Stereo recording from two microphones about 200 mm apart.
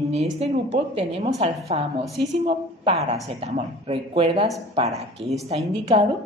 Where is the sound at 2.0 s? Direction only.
Centre (ahead or behind).